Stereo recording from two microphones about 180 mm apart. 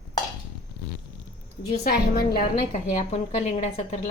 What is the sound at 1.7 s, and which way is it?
A woman's voice, 55° left (ahead or behind).